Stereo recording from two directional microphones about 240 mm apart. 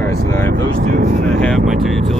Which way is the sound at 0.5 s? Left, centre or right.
Right.